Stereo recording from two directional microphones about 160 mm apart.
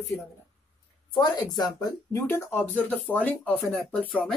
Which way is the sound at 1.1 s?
25° left (ahead or behind).